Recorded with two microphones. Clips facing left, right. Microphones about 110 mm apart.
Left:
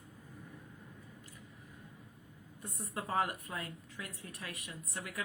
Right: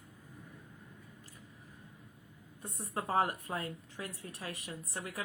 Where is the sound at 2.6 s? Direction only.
30° right (ahead or behind).